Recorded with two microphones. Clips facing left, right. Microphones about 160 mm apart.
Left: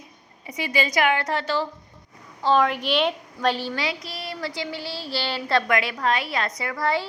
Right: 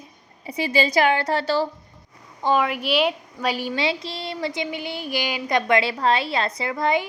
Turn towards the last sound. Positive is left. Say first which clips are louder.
# right 3 dB
turn(degrees=-20)  # may be behind; listen again after turning